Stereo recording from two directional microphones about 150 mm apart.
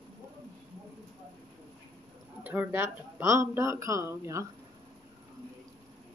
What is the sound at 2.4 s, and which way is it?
Speech, 10° right (ahead or behind).